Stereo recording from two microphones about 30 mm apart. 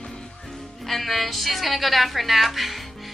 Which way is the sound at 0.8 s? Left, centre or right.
Centre.